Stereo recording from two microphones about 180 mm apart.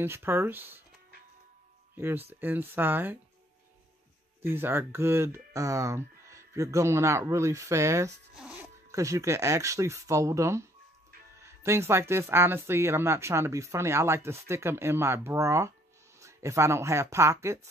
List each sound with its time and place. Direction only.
0.0 s speech: 15° right (ahead or behind)
2.0 s speech: 10° right (ahead or behind)
4.4 s speech: 10° right (ahead or behind)
8.4 s a sound: 5° right (ahead or behind)
8.9 s speech: 15° right (ahead or behind)